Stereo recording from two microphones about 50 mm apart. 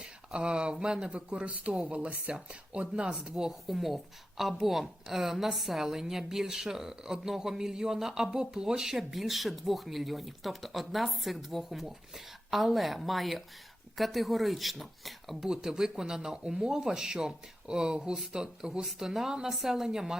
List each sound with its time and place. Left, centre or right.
0.3 s speech: centre
3.7 s a woman's voice: centre